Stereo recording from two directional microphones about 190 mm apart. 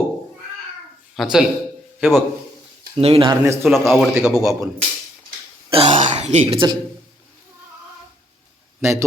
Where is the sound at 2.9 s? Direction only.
30° right (ahead or behind).